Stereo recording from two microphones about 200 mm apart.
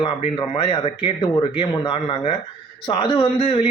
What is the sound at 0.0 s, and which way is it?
Speech, 25° left (ahead or behind).